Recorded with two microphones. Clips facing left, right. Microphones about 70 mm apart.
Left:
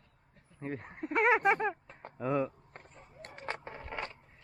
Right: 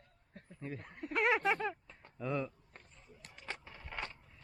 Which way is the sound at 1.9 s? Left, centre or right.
Left.